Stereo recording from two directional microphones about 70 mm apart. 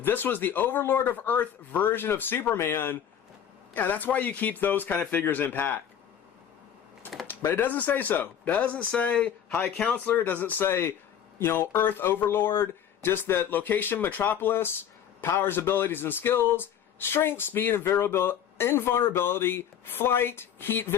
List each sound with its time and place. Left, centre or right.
0.0 s speech: left
7.3 s speech: left